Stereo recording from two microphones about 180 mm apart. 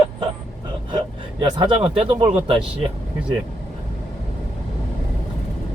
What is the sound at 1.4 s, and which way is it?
Speech, 25° right (ahead or behind).